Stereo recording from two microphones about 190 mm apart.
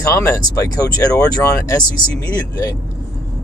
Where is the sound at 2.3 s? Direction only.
20° left (ahead or behind).